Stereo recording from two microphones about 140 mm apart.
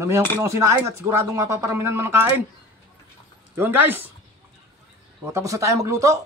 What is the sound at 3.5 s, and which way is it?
Speech, 15° right (ahead or behind).